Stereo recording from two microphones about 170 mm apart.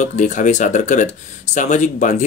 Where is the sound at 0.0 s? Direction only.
45° left (ahead or behind).